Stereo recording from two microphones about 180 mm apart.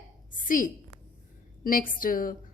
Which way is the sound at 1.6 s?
50° left (ahead or behind).